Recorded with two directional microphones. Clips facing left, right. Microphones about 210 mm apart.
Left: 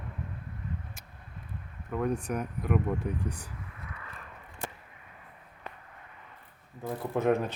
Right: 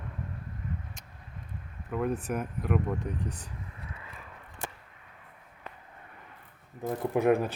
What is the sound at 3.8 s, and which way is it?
Vehicle, 25° right (ahead or behind).